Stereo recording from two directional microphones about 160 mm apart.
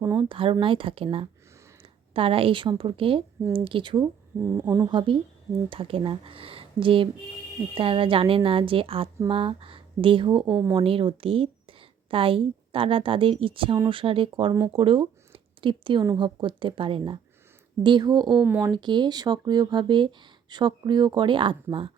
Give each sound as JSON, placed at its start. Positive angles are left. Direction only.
{"t": 0.2, "sound": "speech", "side_deg": -35}
{"t": 4.5, "sound": "speech", "side_deg": -15}
{"t": 10.4, "sound": "a woman's voice", "side_deg": -5}
{"t": 10.8, "sound": "a woman's voice", "side_deg": -35}
{"t": 18.3, "sound": "speech", "side_deg": -5}
{"t": 18.6, "sound": "speech", "side_deg": -25}